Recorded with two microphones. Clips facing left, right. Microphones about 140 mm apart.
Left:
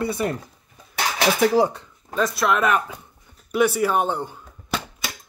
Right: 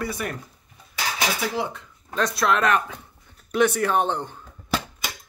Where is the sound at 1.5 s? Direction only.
40° left (ahead or behind).